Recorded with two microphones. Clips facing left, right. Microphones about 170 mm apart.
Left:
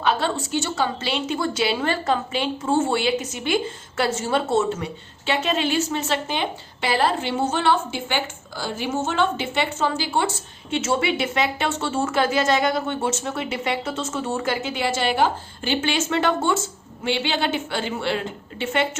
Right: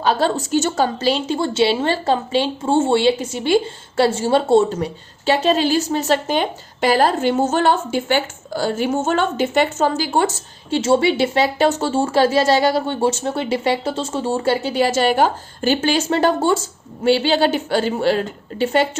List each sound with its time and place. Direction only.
0.0 s a woman's voice: 35° right (ahead or behind)